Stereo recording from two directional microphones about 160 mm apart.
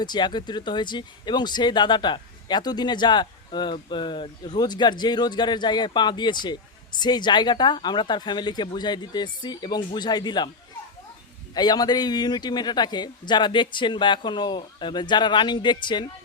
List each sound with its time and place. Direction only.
0.0 s speech: 30° left (ahead or behind)
11.5 s speech: 25° left (ahead or behind)